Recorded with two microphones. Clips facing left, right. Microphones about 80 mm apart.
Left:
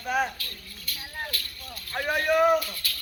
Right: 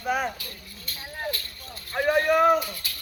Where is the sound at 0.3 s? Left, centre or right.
Right.